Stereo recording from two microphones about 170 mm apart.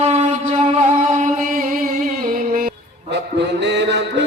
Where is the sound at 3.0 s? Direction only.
90° right.